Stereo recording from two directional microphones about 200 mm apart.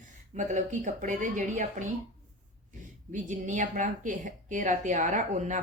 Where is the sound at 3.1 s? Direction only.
40° right (ahead or behind).